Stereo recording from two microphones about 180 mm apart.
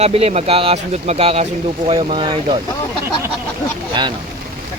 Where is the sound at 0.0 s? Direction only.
35° right (ahead or behind).